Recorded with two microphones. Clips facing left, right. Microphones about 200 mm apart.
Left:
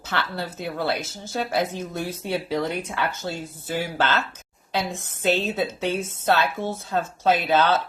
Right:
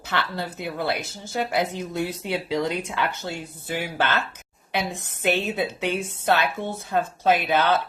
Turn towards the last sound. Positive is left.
turn(degrees=-15)  # may be behind; listen again after turning